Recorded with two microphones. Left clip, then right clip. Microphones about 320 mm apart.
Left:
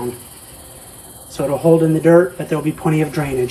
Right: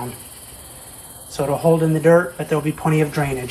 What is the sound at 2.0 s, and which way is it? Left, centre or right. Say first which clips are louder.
Speech: left 1 dB; right.